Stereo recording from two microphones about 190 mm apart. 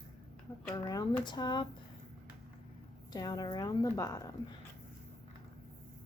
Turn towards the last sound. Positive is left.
turn(degrees=15)  # may be behind; listen again after turning